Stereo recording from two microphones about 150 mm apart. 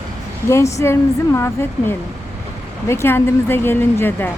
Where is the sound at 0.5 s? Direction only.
20° left (ahead or behind).